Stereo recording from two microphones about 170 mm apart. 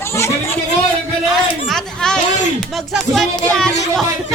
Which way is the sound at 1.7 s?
5° left (ahead or behind).